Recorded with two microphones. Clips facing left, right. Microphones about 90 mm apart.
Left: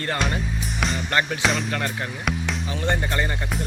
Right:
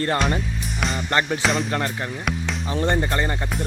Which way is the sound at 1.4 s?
Centre (ahead or behind).